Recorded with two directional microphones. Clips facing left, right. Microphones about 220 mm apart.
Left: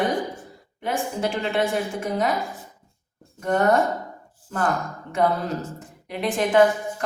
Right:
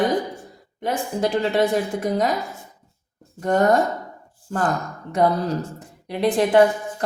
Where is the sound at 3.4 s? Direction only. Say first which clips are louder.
Right 2 dB; 40° right (ahead or behind).